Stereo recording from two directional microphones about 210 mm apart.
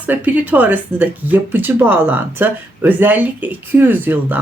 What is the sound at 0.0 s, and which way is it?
Speech, 10° right (ahead or behind).